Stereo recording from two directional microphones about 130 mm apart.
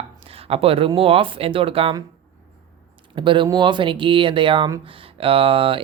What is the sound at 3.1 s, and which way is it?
Speech, 40° right (ahead or behind).